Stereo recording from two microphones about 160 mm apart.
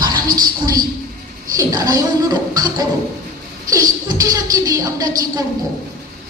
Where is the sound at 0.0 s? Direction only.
25° right (ahead or behind).